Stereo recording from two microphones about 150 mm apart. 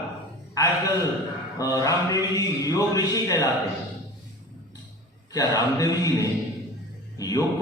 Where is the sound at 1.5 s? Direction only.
25° left (ahead or behind).